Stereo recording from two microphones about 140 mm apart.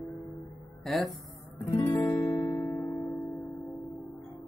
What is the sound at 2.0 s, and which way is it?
Music, 15° left (ahead or behind).